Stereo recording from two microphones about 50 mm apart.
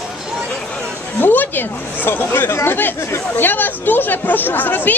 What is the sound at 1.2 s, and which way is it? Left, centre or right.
Speech, left.